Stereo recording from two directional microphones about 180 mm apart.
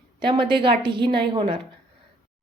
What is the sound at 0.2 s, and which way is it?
A woman's voice, 30° right (ahead or behind).